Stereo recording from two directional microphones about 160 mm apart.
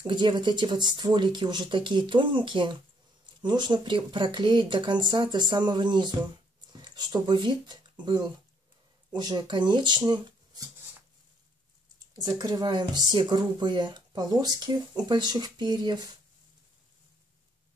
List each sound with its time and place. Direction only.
0.0 s speech: 30° right (ahead or behind)
12.4 s speech: 25° right (ahead or behind)